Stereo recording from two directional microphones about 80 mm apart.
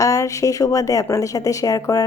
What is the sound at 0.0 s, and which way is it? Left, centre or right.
Speech, left.